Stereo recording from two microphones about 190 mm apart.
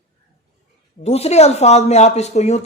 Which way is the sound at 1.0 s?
35° left (ahead or behind).